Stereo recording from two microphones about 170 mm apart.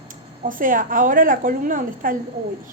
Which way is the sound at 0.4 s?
55° right (ahead or behind).